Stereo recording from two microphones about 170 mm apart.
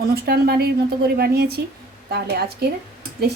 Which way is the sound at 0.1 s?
65° right (ahead or behind).